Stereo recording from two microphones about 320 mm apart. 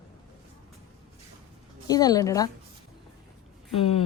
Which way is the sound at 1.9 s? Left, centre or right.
Centre.